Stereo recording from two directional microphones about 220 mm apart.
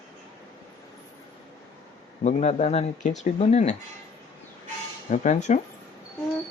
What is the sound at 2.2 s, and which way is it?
Speech, 30° left (ahead or behind).